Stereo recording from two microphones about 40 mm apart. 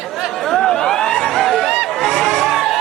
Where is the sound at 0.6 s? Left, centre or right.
Centre.